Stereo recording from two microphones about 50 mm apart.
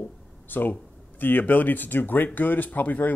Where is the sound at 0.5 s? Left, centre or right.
Left.